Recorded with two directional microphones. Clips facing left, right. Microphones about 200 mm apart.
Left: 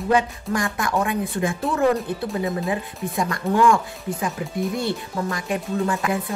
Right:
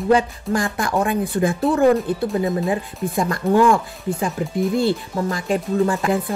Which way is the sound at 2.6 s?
35° right (ahead or behind).